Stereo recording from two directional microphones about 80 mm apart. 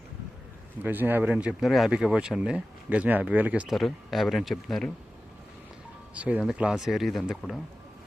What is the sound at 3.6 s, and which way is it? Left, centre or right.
Speech, centre.